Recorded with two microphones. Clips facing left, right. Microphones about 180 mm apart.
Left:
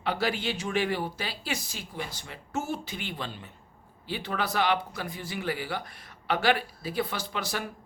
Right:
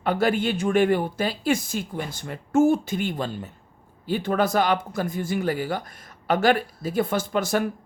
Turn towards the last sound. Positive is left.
turn(degrees=-45)  # may be behind; listen again after turning